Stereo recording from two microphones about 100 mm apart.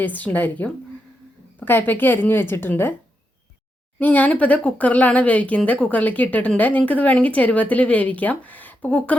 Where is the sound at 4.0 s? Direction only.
15° left (ahead or behind).